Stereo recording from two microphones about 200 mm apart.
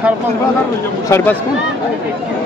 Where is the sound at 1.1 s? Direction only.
10° left (ahead or behind).